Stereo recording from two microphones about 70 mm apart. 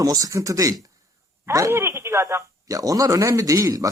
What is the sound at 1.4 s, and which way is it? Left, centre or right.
Speech, right.